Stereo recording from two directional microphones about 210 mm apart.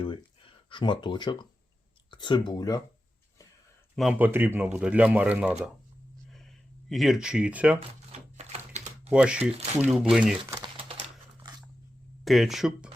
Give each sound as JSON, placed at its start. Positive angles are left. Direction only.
{"t": 0.0, "sound": "speech", "side_deg": 25}
{"t": 3.9, "sound": "speech", "side_deg": -5}
{"t": 6.3, "sound": "a sound", "side_deg": 0}
{"t": 8.1, "sound": "typewriter", "side_deg": -30}
{"t": 9.0, "sound": "speech", "side_deg": -5}
{"t": 10.5, "sound": "typing", "side_deg": -20}
{"t": 12.2, "sound": "speech", "side_deg": 0}